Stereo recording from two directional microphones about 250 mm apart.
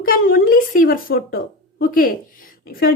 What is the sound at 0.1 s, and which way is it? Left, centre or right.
Speech, left.